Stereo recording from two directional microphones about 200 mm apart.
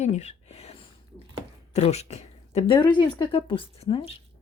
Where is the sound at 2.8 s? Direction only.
20° left (ahead or behind).